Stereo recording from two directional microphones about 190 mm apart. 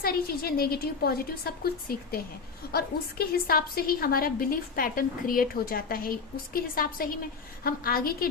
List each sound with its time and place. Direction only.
0.0 s a woman's voice: 55° left (ahead or behind)